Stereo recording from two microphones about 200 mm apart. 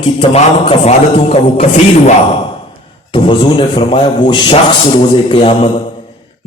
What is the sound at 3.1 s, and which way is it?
A man's voice, 25° left (ahead or behind).